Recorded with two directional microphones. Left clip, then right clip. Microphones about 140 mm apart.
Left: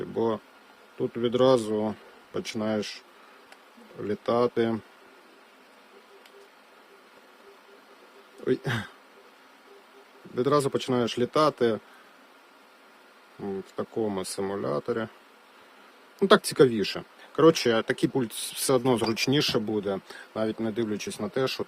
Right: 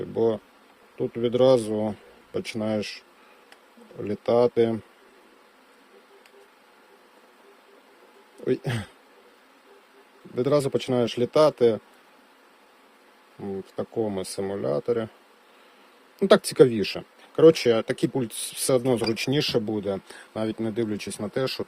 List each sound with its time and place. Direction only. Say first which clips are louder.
0.2 s speech: right 4 dB; centre (ahead or behind)
4.0 s speech: right 4 dB; 5° right (ahead or behind)
8.4 s speech: right 1 dB; centre (ahead or behind)
10.3 s speech: right 1 dB; centre (ahead or behind)
13.7 s speech: right 2 dB; centre (ahead or behind)
16.1 s speech: right 3 dB; centre (ahead or behind)